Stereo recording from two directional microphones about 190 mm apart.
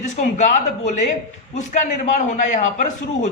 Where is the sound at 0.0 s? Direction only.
40° left (ahead or behind).